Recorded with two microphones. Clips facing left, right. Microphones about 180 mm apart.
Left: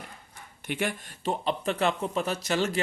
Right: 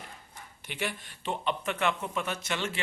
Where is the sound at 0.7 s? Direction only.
50° left (ahead or behind).